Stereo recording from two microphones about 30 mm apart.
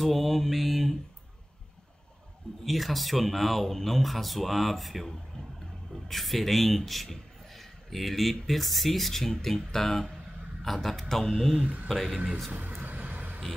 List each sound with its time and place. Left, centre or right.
0.0 s mantra: centre
2.6 s speech: centre
6.0 s a man's voice: centre
11.9 s speech: centre
12.4 s vehicle: right